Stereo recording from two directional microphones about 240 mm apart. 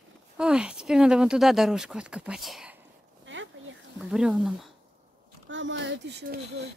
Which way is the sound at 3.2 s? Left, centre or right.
Right.